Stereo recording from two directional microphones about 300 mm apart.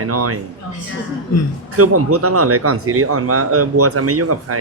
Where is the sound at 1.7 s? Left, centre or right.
Right.